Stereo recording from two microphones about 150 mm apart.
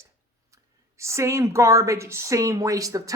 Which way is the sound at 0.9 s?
20° right (ahead or behind).